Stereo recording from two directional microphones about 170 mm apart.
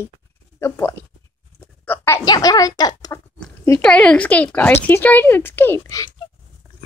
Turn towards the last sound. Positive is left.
turn(degrees=15)  # may be behind; listen again after turning